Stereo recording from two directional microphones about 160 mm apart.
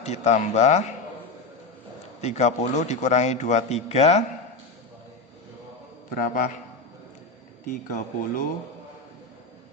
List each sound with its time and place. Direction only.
0.0 s a man's voice: 45° left (ahead or behind)
2.2 s a man's voice: 45° left (ahead or behind)
6.1 s speech: 55° left (ahead or behind)
7.7 s speech: 55° left (ahead or behind)